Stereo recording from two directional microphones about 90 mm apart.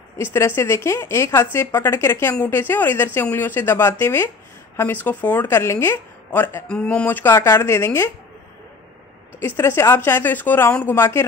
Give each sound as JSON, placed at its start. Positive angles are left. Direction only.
{"t": 0.2, "sound": "speech", "side_deg": 25}
{"t": 6.7, "sound": "speech", "side_deg": 10}
{"t": 9.6, "sound": "speech", "side_deg": 30}